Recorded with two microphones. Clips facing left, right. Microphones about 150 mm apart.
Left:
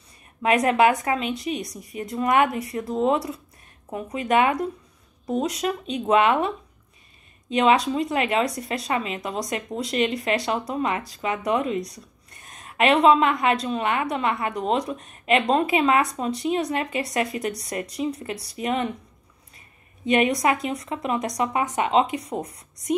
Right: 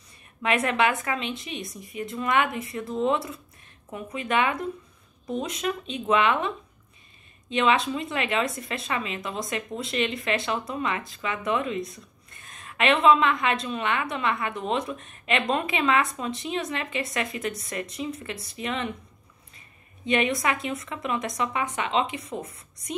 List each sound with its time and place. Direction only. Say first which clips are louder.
0.4 s a woman's voice: left 5 dB; 40° left (ahead or behind)
20.1 s a woman's voice: left 4 dB; 40° left (ahead or behind)